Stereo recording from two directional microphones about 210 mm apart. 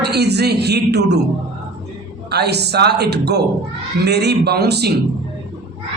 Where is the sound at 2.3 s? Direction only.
50° right (ahead or behind).